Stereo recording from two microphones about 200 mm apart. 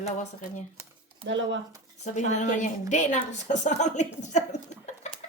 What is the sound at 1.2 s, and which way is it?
Speech, 70° right (ahead or behind).